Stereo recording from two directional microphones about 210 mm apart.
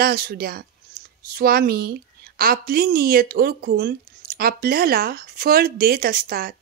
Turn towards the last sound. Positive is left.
turn(degrees=-45)  # may be behind; listen again after turning